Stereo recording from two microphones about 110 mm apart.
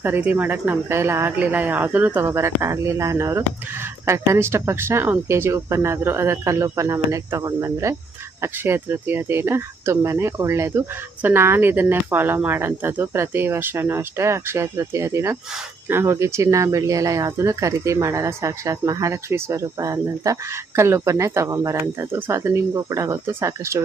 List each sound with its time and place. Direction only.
0.0 s speech: 15° right (ahead or behind)